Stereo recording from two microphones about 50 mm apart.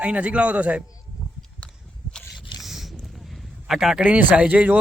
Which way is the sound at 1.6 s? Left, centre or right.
Left.